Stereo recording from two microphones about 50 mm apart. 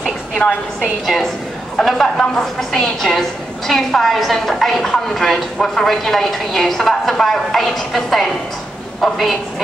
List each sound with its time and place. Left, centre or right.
0.4 s a woman's voice: left
1.0 s a woman's voice: centre